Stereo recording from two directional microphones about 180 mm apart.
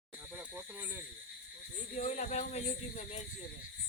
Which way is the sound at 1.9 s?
40° left (ahead or behind).